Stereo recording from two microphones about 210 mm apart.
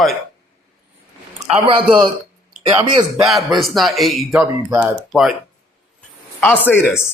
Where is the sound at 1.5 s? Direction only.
25° right (ahead or behind).